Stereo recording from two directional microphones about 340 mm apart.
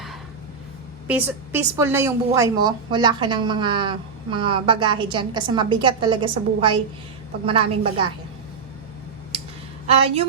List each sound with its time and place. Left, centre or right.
1.0 s a woman's voice: centre
9.8 s a woman's voice: centre